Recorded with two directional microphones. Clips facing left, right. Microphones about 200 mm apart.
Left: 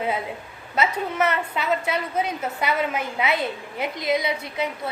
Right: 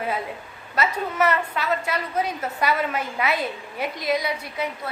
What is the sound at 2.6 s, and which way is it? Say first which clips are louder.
A woman's voice: right 1 dB; 20° left (ahead or behind).